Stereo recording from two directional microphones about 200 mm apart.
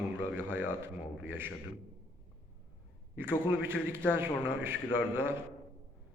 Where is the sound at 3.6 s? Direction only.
10° right (ahead or behind).